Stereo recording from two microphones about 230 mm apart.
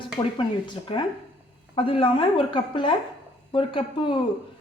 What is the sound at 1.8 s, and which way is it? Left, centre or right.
Speech, left.